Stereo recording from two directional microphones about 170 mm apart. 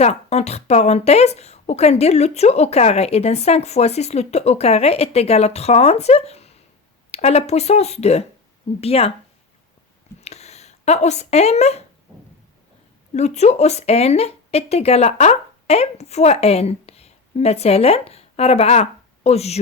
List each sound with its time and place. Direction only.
0.0 s a woman's voice: 40° left (ahead or behind)
10.2 s speech: 40° left (ahead or behind)
13.1 s a woman's voice: 40° left (ahead or behind)